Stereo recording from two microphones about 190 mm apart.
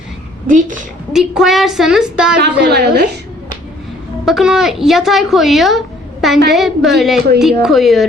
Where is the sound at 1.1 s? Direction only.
Centre (ahead or behind).